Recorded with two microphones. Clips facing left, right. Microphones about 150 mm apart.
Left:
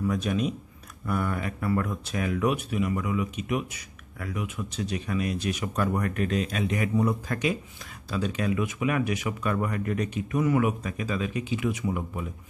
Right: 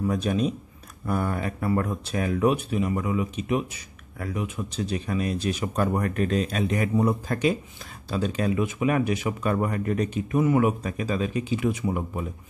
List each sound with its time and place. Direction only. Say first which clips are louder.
0.0 s speech: right 2 dB; 30° right (ahead or behind)